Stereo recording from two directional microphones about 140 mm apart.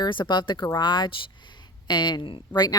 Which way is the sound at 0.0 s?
35° left (ahead or behind).